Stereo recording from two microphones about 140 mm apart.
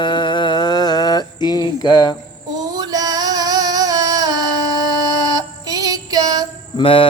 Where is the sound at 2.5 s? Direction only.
30° right (ahead or behind).